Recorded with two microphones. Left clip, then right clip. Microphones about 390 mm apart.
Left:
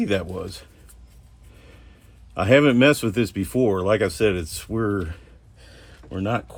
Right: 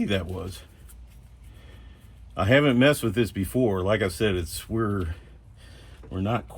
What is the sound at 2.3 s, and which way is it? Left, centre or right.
Speech, left.